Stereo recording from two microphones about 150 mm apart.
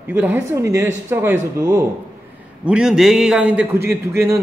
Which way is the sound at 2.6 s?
5° right (ahead or behind).